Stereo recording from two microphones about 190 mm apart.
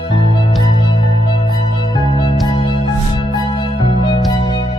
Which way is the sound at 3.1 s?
25° left (ahead or behind).